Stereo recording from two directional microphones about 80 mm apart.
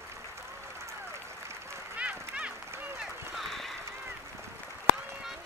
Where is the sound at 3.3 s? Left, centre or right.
Centre.